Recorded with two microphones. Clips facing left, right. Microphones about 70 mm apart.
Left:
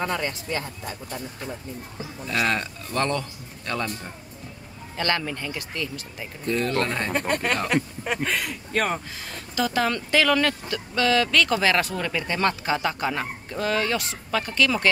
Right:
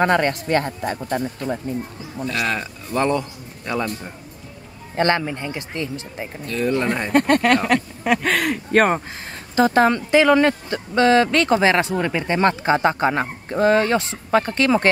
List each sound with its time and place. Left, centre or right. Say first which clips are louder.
0.0 s speech: right 9 dB; right
2.2 s speech: right 1 dB; centre
4.9 s speech: right 7 dB; right
6.6 s speech: right 7 dB; centre
7.1 s speech: right 9 dB; right
9.6 s speech: right 8 dB; right
9.9 s speech: right 6 dB; right